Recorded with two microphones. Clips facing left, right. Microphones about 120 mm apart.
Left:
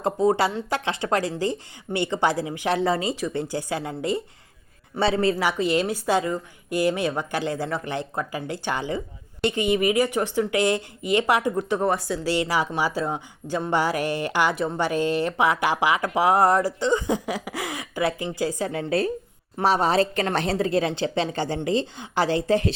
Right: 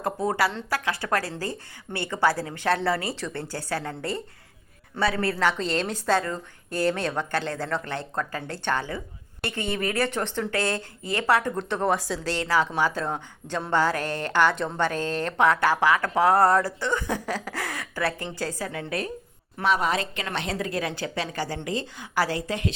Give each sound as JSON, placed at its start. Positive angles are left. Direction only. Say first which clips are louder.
{"t": 0.0, "sound": "a woman's voice", "louder": "left 4 dB", "side_deg": 20}
{"t": 12.3, "sound": "a woman's voice", "louder": "left 1 dB", "side_deg": 15}
{"t": 18.7, "sound": "a woman's voice", "louder": "left 7 dB", "side_deg": 25}